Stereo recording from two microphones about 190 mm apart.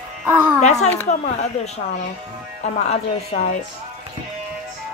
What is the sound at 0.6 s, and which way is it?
Speech, 35° left (ahead or behind).